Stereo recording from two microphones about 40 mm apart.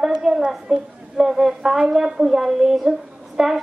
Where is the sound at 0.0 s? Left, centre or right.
Centre.